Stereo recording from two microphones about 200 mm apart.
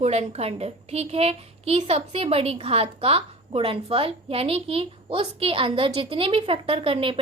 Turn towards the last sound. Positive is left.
turn(degrees=-25)  # may be behind; listen again after turning